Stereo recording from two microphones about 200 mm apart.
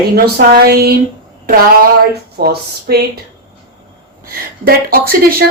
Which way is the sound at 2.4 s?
50° right (ahead or behind).